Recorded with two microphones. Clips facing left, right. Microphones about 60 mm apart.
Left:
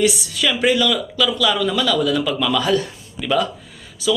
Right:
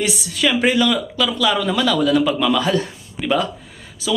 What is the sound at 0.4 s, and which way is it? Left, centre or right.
Speech, right.